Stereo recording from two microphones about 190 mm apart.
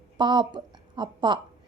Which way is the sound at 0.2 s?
25° right (ahead or behind).